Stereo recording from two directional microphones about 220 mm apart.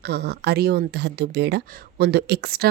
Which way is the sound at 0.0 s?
50° right (ahead or behind).